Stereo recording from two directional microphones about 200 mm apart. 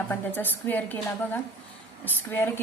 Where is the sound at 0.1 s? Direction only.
10° left (ahead or behind).